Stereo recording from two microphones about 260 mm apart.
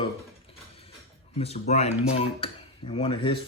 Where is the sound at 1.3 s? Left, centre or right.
Left.